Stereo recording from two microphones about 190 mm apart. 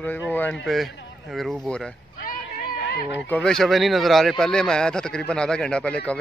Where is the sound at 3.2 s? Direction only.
5° left (ahead or behind).